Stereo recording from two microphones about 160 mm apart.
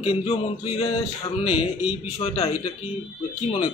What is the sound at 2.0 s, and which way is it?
Speech, 40° left (ahead or behind).